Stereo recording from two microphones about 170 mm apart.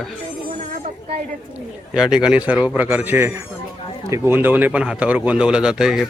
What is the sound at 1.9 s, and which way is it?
A man's voice, 5° right (ahead or behind).